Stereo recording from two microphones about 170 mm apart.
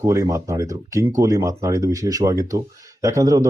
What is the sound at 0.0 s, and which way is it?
Speech, 20° right (ahead or behind).